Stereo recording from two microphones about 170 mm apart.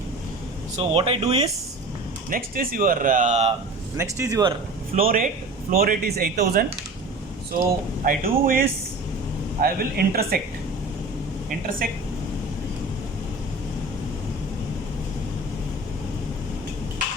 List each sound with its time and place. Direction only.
0.8 s speech: 35° right (ahead or behind)
2.3 s speech: 55° right (ahead or behind); by 3.5 s 40° right (ahead or behind)
3.9 s speech: 20° right (ahead or behind)
4.9 s speech: 55° right (ahead or behind)
8.0 s speech: 60° right (ahead or behind)